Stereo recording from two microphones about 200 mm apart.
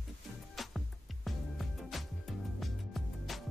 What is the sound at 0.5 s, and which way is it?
Music, centre (ahead or behind).